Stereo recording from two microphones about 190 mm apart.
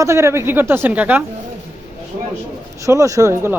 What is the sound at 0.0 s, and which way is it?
A woman's voice, 15° right (ahead or behind).